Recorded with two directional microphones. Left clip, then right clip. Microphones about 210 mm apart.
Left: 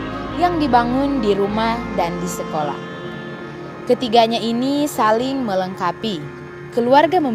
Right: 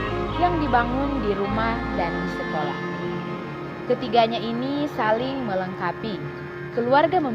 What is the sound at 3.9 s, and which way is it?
A woman's voice, 55° left (ahead or behind).